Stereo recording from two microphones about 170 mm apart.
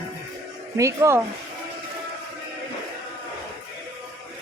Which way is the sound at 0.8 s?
15° right (ahead or behind).